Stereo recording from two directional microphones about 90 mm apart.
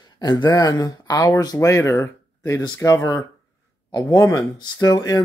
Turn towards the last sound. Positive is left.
turn(degrees=45)  # may be behind; listen again after turning